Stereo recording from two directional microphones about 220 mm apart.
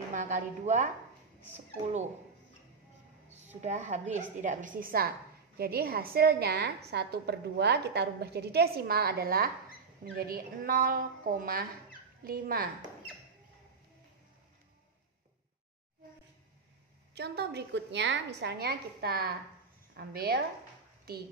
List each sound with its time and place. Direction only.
0.1 s a woman's voice: 35° right (ahead or behind)
3.3 s a woman's voice: 30° right (ahead or behind)
17.1 s a woman's voice: 50° right (ahead or behind)